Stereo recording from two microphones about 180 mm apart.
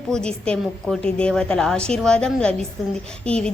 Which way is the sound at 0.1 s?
5° left (ahead or behind).